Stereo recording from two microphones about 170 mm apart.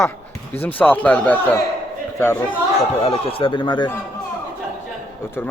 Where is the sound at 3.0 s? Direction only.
35° left (ahead or behind).